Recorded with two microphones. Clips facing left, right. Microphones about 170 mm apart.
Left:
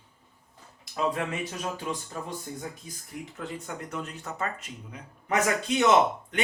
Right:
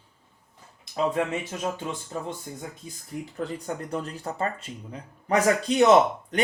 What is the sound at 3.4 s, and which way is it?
Speech, 35° right (ahead or behind).